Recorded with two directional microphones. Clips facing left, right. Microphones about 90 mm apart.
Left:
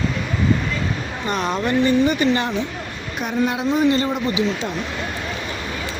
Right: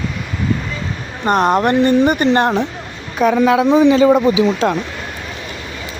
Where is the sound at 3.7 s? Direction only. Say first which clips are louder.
Right 8 dB; 90° right.